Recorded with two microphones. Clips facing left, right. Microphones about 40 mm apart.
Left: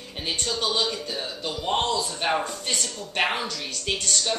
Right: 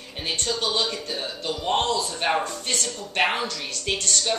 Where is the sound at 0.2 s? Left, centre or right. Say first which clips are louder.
Right 1 dB; centre.